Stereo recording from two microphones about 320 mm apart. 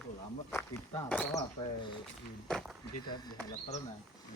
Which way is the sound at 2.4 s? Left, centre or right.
Centre.